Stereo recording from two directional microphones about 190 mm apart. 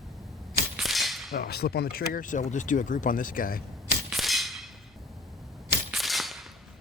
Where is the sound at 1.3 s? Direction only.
55° left (ahead or behind).